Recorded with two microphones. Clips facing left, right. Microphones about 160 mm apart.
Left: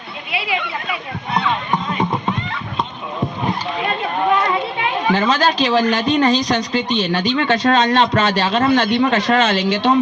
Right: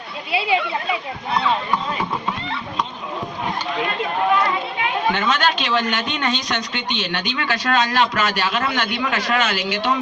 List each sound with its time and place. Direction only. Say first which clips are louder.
0.3 s speech: right 3 dB; 30° right (ahead or behind)
5.1 s speech: left 4 dB; 35° left (ahead or behind)